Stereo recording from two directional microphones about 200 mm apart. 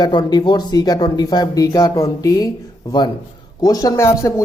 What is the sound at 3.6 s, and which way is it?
Speech, 15° left (ahead or behind).